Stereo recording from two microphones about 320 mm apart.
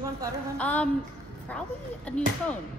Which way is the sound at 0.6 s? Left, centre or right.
Centre.